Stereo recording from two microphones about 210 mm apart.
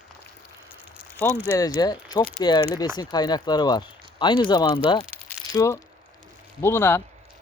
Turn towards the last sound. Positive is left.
turn(degrees=10)  # may be behind; listen again after turning